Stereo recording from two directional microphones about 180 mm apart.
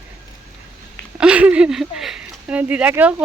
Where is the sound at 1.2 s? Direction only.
5° right (ahead or behind).